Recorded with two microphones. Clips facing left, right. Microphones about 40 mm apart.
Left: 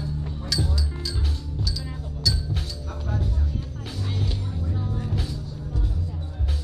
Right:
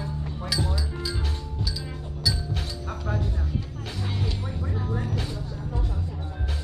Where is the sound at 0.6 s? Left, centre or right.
Right.